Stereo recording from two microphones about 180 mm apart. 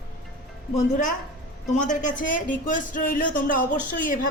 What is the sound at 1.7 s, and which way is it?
A woman's voice, 45° left (ahead or behind).